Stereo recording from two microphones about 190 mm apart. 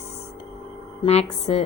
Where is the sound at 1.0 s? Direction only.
35° left (ahead or behind).